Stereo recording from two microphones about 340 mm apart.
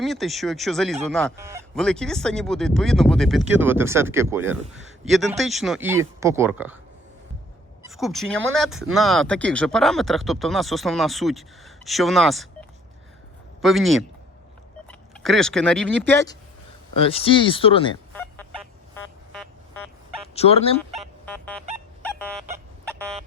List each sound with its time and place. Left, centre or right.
0.0 s speech: centre
7.9 s speech: centre
18.1 s fowl: centre
20.3 s chicken: centre
20.9 s music: centre
22.0 s fowl: centre